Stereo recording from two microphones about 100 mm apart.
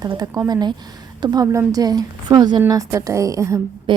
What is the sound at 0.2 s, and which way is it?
A woman's voice, 40° right (ahead or behind).